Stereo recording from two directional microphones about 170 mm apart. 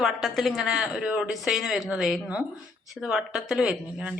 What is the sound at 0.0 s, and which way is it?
A woman's voice, centre (ahead or behind).